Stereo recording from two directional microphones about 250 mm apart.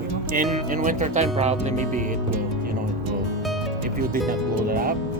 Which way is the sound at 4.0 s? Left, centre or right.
Right.